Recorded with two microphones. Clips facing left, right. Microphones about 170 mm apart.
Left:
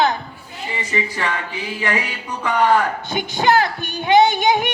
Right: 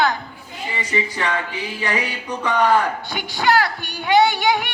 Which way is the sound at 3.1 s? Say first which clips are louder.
Left 2 dB; 20° left (ahead or behind).